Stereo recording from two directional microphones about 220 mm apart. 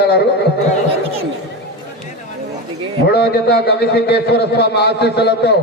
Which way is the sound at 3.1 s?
50° left (ahead or behind).